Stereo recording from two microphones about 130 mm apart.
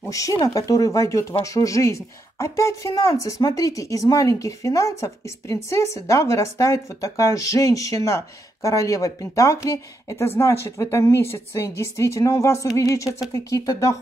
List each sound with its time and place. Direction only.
0.1 s speech: 25° left (ahead or behind)